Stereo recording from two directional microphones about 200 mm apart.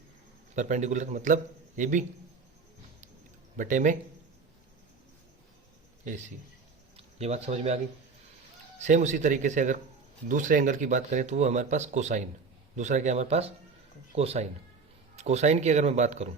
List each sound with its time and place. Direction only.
0.5 s speech: 35° right (ahead or behind)
3.6 s speech: 40° right (ahead or behind)
6.9 s speech: 30° right (ahead or behind)
8.8 s speech: 35° right (ahead or behind)